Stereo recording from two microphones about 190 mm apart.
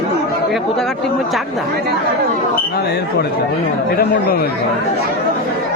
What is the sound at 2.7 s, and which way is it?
Speech, 55° left (ahead or behind).